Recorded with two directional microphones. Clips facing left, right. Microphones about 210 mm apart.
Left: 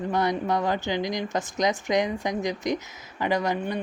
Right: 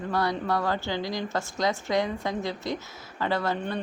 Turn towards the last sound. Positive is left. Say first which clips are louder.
# left 2 dB
turn(degrees=15)  # may be behind; listen again after turning